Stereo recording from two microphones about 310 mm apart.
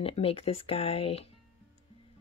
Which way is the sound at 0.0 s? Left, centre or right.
Centre.